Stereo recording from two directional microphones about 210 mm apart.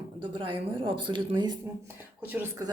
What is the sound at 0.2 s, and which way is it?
A woman's voice, 25° right (ahead or behind).